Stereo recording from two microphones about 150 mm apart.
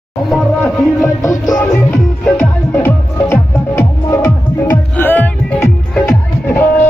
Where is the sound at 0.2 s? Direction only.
Centre (ahead or behind).